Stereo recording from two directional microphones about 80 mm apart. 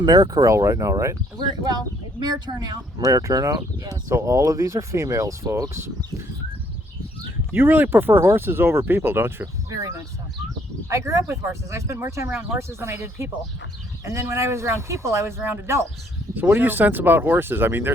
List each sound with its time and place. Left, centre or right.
0.0 s speech: right
2.1 s speech: right
3.0 s speech: right
4.1 s speech: right
7.5 s speech: right
9.6 s speech: right
16.3 s speech: right